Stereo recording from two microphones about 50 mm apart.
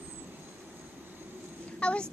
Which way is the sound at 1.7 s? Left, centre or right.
Left.